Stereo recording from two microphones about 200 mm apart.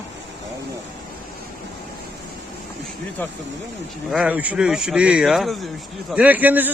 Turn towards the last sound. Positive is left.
turn(degrees=-10)  # may be behind; listen again after turning